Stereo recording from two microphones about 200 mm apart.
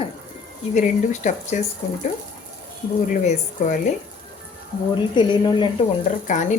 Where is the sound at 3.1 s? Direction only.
40° left (ahead or behind).